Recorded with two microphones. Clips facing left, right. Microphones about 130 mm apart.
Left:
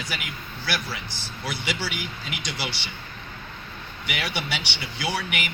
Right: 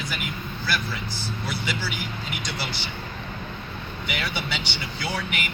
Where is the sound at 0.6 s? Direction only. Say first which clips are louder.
Right 1 dB; 85° left.